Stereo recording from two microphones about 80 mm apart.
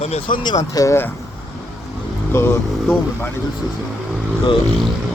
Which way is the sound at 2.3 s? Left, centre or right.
Left.